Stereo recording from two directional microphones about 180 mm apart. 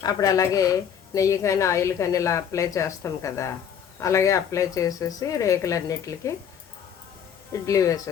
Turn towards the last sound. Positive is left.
turn(degrees=15)  # may be behind; listen again after turning